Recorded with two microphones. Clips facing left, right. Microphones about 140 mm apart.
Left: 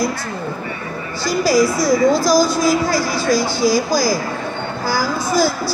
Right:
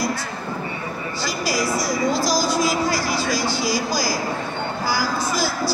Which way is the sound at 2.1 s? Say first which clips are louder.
Left 6 dB; 50° left (ahead or behind).